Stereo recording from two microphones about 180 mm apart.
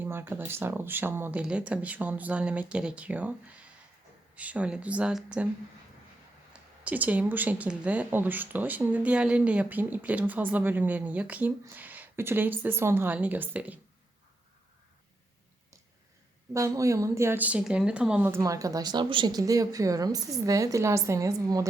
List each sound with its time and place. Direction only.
0.0 s speech: 10° right (ahead or behind)
4.4 s speech: 5° right (ahead or behind)
6.5 s speech: 10° right (ahead or behind)
16.5 s speech: 15° right (ahead or behind)